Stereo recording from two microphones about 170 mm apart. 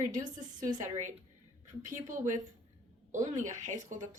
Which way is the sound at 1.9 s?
50° right (ahead or behind).